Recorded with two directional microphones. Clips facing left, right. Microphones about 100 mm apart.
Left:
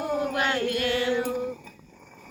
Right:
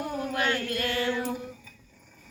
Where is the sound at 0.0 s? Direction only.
25° left (ahead or behind).